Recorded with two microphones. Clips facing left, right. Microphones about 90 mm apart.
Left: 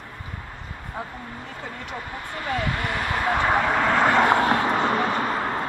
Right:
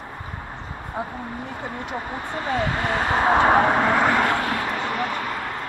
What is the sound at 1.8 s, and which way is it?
Speech, 25° right (ahead or behind).